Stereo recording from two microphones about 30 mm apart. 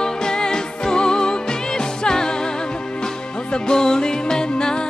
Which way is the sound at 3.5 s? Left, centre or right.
Left.